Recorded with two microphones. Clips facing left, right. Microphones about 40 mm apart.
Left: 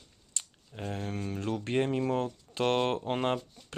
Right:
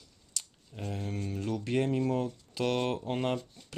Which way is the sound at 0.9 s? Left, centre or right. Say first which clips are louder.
Left 1 dB; left.